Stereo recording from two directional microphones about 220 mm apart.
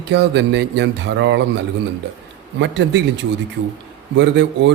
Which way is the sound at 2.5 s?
55° right (ahead or behind).